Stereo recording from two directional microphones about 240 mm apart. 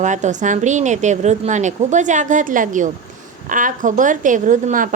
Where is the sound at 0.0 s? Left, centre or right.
Right.